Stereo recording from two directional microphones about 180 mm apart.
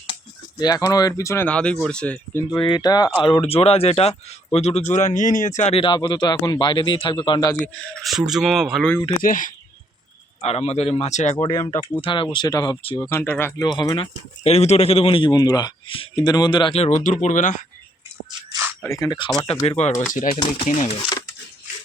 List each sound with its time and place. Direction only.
0.6 s speech: 20° left (ahead or behind)
2.6 s a man's voice: 25° left (ahead or behind)
7.6 s speech: 5° left (ahead or behind)
9.2 s speech: 50° left (ahead or behind)
10.4 s a man's voice: 35° left (ahead or behind)
11.7 s speech: 10° left (ahead or behind)
12.0 s speech: 25° left (ahead or behind); by 13.7 s 10° left (ahead or behind)
13.7 s a man's voice: 25° left (ahead or behind); by 17.6 s 45° left (ahead or behind)
18.3 s whispering: 20° right (ahead or behind)
18.8 s speech: 20° left (ahead or behind)
19.6 s a man's voice: 40° left (ahead or behind)